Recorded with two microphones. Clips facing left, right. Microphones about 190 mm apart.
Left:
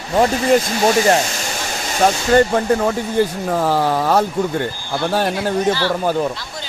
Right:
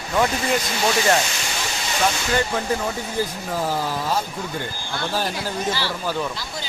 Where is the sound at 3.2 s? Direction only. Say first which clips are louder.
Left 7 dB; 65° left (ahead or behind).